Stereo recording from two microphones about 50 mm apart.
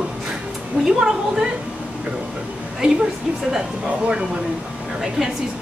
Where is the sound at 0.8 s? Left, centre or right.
Right.